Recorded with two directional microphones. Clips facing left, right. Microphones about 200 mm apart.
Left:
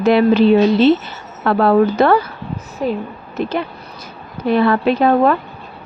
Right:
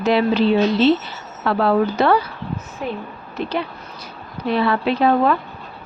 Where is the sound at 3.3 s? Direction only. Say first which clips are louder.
Left 3 dB; 50° left (ahead or behind).